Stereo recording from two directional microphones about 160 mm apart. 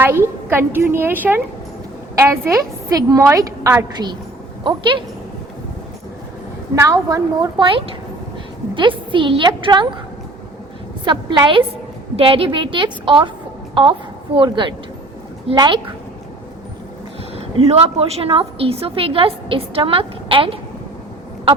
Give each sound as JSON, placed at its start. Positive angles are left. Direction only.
{"t": 0.0, "sound": "a woman's voice", "side_deg": -15}
{"t": 6.7, "sound": "a woman's voice", "side_deg": -20}
{"t": 8.7, "sound": "a woman's voice", "side_deg": -30}
{"t": 11.0, "sound": "a woman's voice", "side_deg": -30}
{"t": 14.3, "sound": "a woman's voice", "side_deg": -30}
{"t": 17.3, "sound": "a woman's voice", "side_deg": -40}